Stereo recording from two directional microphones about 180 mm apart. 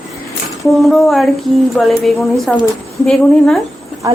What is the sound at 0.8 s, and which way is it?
Speech, centre (ahead or behind).